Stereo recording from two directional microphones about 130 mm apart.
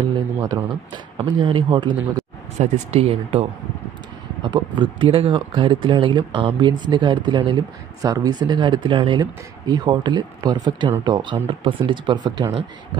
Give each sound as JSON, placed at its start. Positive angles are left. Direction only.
{"t": 0.5, "sound": "speech", "side_deg": -35}
{"t": 2.6, "sound": "speech", "side_deg": -55}
{"t": 4.4, "sound": "speech", "side_deg": -35}